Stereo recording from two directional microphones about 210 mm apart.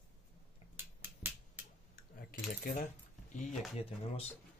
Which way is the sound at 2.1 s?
40° left (ahead or behind).